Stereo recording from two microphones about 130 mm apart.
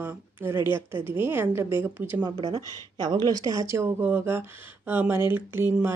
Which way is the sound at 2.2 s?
35° right (ahead or behind).